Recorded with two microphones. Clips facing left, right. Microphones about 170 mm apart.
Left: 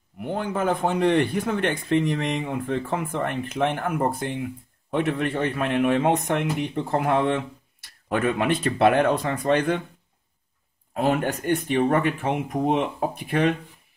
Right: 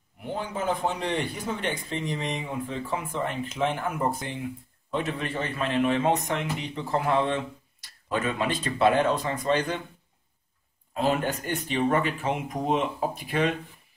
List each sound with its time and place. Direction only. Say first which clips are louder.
0.2 s a man's voice: left 5 dB; 55° left (ahead or behind)
10.9 s a man's voice: left 3 dB; 55° left (ahead or behind)